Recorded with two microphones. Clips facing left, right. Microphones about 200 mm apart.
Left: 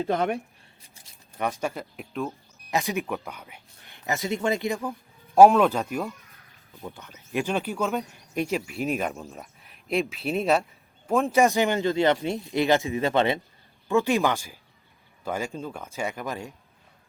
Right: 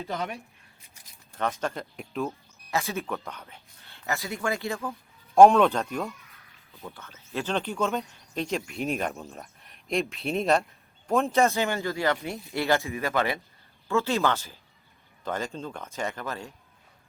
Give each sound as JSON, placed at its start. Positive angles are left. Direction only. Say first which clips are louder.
{"t": 0.0, "sound": "speech", "louder": "left 8 dB", "side_deg": 50}
{"t": 1.4, "sound": "speech", "louder": "left 1 dB", "side_deg": 10}
{"t": 2.6, "sound": "speech", "louder": "left 3 dB", "side_deg": 15}
{"t": 5.3, "sound": "speech", "louder": "left 1 dB", "side_deg": 5}
{"t": 6.8, "sound": "speech", "louder": "left 3 dB", "side_deg": 15}
{"t": 11.3, "sound": "a man's voice", "louder": "left 3 dB", "side_deg": 15}